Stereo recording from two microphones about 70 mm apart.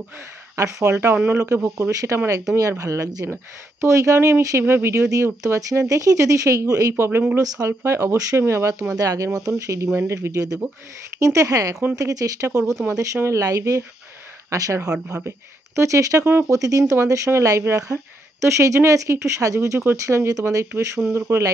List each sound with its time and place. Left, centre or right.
0.6 s speech: right
1.1 s speech: right
1.8 s speech: right
7.1 s speech: right
7.3 s speech: right
8.9 s speech: right
14.9 s speech: centre
15.2 s speech: right
20.2 s speech: right